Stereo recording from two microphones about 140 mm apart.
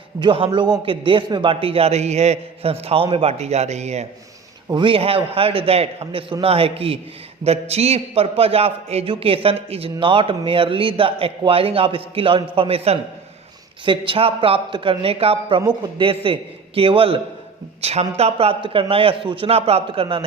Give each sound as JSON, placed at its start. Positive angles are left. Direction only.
{"t": 0.2, "sound": "a man's voice", "side_deg": -40}
{"t": 4.7, "sound": "a man's voice", "side_deg": -35}